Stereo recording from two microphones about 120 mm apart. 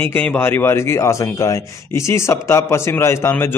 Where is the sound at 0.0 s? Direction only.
15° left (ahead or behind).